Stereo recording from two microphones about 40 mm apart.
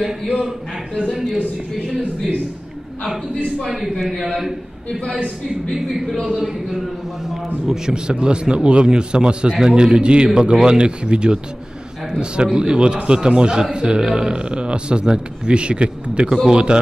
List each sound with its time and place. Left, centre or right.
5.8 s a man's voice: centre; by 16.8 s right